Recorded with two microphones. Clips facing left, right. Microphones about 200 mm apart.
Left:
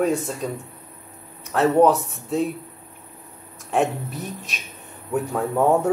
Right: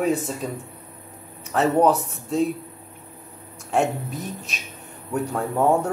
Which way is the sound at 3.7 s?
Centre (ahead or behind).